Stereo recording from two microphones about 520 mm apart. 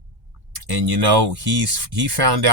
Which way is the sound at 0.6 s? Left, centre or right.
Right.